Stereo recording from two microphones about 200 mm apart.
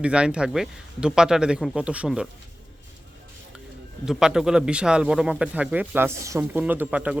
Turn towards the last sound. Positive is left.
turn(degrees=-5)  # may be behind; listen again after turning